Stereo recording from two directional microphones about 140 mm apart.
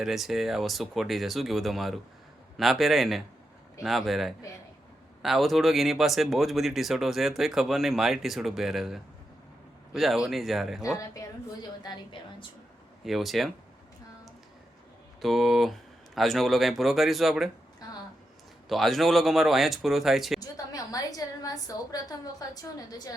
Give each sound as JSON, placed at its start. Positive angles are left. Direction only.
{"t": 0.0, "sound": "speech", "side_deg": 0}
{"t": 11.8, "sound": "a woman's voice", "side_deg": 35}
{"t": 13.1, "sound": "speech", "side_deg": 0}
{"t": 15.2, "sound": "speech", "side_deg": 0}
{"t": 18.7, "sound": "speech", "side_deg": 0}
{"t": 20.4, "sound": "a woman's voice", "side_deg": 25}